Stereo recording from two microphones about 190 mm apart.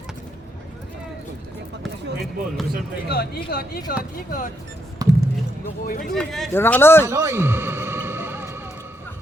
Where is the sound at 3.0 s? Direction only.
55° left (ahead or behind).